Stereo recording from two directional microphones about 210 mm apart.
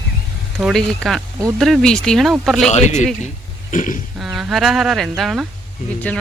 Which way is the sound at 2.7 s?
35° left (ahead or behind).